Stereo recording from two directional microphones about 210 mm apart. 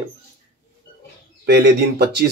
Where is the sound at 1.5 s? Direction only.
50° right (ahead or behind).